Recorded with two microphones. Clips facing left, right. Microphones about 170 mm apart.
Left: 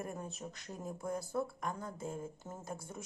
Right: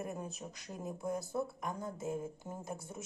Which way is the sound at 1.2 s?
25° right (ahead or behind).